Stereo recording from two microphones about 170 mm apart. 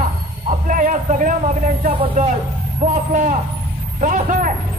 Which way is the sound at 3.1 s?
50° right (ahead or behind).